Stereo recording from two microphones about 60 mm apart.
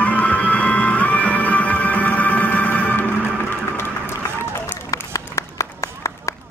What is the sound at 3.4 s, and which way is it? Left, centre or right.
Run, left.